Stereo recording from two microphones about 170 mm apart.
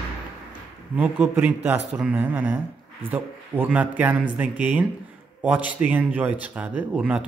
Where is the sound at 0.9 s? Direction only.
10° right (ahead or behind).